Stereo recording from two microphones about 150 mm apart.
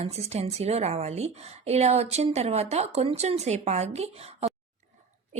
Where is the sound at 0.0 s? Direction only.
45° right (ahead or behind).